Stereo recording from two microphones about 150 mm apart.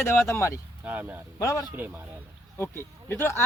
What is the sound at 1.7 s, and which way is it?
Speech, 15° right (ahead or behind).